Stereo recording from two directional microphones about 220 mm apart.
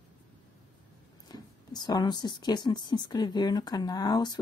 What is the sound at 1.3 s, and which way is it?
Speech, 20° left (ahead or behind).